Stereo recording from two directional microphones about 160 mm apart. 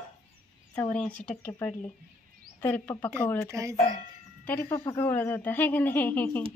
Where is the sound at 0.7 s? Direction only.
10° left (ahead or behind).